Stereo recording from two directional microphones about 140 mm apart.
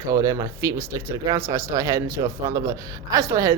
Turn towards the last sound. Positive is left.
turn(degrees=-20)  # may be behind; listen again after turning